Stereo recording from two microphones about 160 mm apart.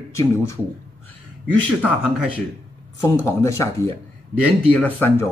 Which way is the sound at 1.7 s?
10° right (ahead or behind).